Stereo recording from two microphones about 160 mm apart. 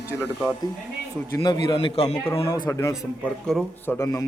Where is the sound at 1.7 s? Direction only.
40° left (ahead or behind).